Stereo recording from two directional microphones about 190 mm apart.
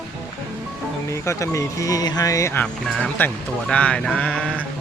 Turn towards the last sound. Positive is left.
turn(degrees=5)  # may be behind; listen again after turning